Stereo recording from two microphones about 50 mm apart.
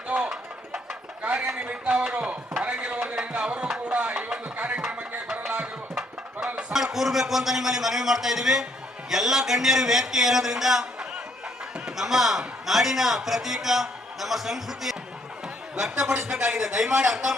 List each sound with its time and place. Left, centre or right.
0.1 s a sound: centre
2.6 s music: centre
3.8 s a sound: right
6.7 s a man's voice: centre
11.9 s a man's voice: centre
15.7 s a man's voice: centre